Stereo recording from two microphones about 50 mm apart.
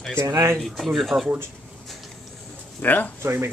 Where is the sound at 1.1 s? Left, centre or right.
Right.